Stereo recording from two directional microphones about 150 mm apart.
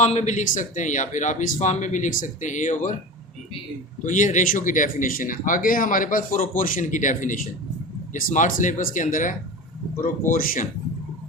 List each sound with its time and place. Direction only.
0.0 s speech: 50° left (ahead or behind)
4.0 s speech: 55° left (ahead or behind)